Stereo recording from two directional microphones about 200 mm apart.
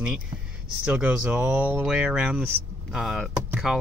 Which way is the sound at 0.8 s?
5° right (ahead or behind).